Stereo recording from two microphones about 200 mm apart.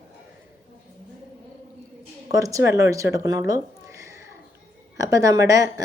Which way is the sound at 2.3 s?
15° right (ahead or behind).